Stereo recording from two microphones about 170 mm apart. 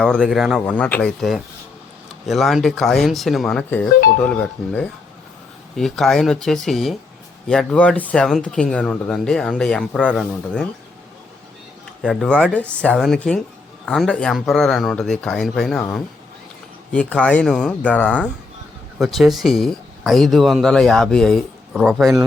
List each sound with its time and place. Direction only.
0.0 s speech: centre (ahead or behind)
0.6 s speech: 10° left (ahead or behind)
12.0 s speech: 5° left (ahead or behind)
16.9 s speech: 5° left (ahead or behind)